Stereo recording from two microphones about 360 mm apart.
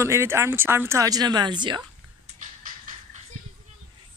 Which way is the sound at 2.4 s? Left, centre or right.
Right.